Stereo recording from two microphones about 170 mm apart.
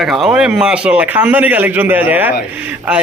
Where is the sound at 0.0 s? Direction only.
5° right (ahead or behind).